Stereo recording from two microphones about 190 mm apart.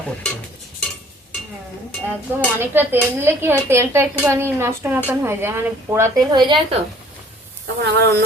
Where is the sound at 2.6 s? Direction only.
10° right (ahead or behind).